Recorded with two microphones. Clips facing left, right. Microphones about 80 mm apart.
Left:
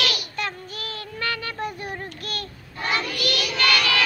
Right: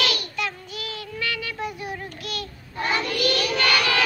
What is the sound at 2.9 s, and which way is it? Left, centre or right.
Child singing, right.